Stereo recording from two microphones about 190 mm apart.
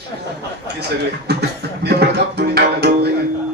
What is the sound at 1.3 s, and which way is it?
Music, 60° right (ahead or behind).